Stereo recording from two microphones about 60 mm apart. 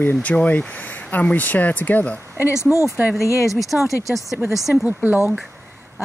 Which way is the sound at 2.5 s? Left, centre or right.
Left.